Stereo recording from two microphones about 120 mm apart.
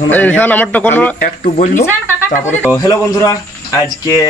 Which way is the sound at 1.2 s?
80° left.